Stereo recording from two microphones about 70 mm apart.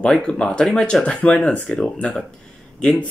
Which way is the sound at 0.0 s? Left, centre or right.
Centre.